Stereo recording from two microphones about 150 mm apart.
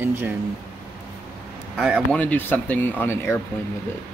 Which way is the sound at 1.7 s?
5° right (ahead or behind).